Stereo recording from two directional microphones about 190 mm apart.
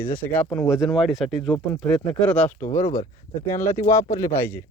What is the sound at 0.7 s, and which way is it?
Speech, centre (ahead or behind).